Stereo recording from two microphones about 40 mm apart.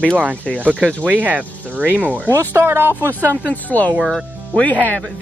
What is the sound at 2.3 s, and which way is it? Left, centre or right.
Speech, right.